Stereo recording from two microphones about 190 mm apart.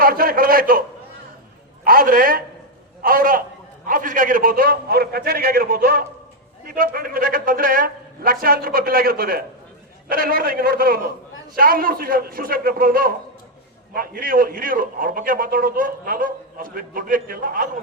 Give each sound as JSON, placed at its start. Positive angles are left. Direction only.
{"t": 0.0, "sound": "a man's voice", "side_deg": -50}
{"t": 1.8, "sound": "a man's voice", "side_deg": -50}